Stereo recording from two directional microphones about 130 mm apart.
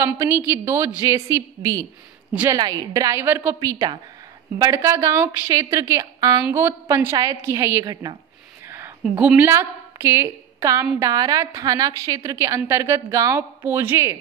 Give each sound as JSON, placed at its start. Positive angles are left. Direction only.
{"t": 0.0, "sound": "a woman's voice", "side_deg": -20}
{"t": 3.5, "sound": "a woman's voice", "side_deg": -30}
{"t": 7.8, "sound": "a woman's voice", "side_deg": -30}
{"t": 8.6, "sound": "a sound", "side_deg": -20}
{"t": 9.0, "sound": "a woman's voice", "side_deg": -10}